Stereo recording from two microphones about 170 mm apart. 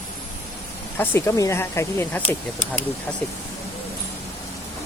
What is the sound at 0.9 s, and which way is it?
Speech, 10° left (ahead or behind).